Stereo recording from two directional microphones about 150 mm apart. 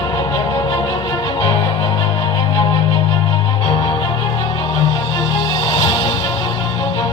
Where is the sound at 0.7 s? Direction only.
30° left (ahead or behind).